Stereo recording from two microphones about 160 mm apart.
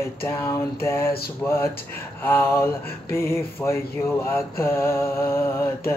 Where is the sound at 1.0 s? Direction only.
75° left (ahead or behind).